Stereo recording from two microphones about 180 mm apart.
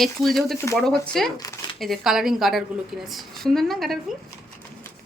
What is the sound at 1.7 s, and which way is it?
Speech, centre (ahead or behind).